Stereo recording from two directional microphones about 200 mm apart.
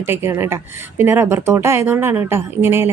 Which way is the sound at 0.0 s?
10° right (ahead or behind).